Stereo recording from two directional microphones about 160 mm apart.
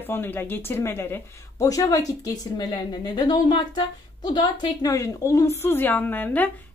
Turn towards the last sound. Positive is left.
turn(degrees=10)  # may be behind; listen again after turning